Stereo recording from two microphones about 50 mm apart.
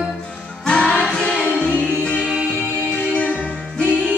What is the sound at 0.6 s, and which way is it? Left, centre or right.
Music, centre.